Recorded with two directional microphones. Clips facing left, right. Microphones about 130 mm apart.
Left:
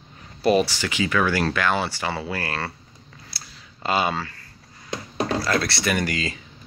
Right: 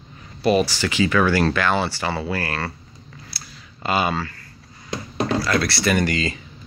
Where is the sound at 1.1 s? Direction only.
Centre (ahead or behind); by 2.7 s 20° left (ahead or behind).